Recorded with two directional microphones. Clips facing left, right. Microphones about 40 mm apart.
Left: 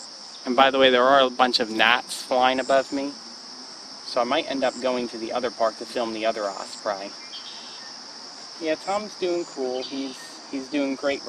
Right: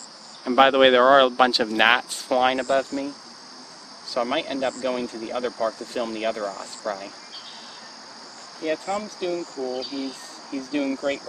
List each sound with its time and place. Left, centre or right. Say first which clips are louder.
0.5 s speech: right 2 dB; centre
4.1 s speech: left 2 dB; centre
8.6 s speech: left 1 dB; centre
9.7 s speech: even; left
10.5 s speech: even; centre